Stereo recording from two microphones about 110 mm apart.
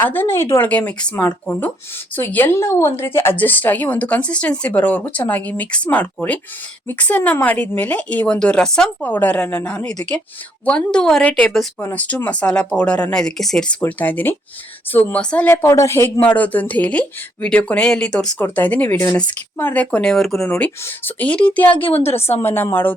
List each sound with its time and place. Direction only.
0.0 s a woman's voice: 20° left (ahead or behind)
15.4 s a woman's voice: 25° left (ahead or behind); by 18.3 s 5° left (ahead or behind)
18.3 s a woman's voice: 15° left (ahead or behind)
20.5 s a woman's voice: 15° left (ahead or behind)
21.8 s a woman's voice: 60° left (ahead or behind)
22.4 s a woman's voice: 20° left (ahead or behind)